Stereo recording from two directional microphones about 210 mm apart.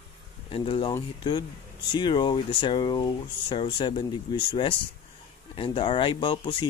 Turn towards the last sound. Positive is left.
turn(degrees=25)  # may be behind; listen again after turning